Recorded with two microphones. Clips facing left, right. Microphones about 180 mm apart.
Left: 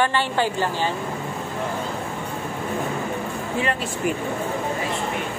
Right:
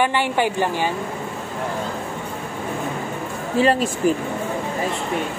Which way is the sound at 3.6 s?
35° right (ahead or behind).